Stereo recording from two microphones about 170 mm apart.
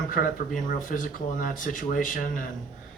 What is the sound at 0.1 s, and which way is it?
Speech, 55° left (ahead or behind).